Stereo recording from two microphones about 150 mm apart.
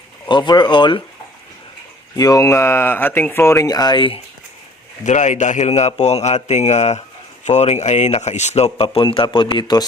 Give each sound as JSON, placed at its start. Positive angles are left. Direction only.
{"t": 0.3, "sound": "speech", "side_deg": 30}
{"t": 2.1, "sound": "speech", "side_deg": 25}
{"t": 5.0, "sound": "speech", "side_deg": 50}